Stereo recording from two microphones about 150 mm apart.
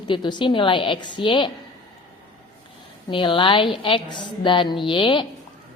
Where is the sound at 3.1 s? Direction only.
35° left (ahead or behind).